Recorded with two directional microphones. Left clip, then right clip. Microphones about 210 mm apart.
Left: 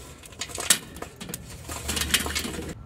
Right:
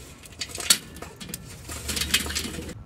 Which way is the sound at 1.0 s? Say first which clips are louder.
Left 1 dB; 10° left (ahead or behind).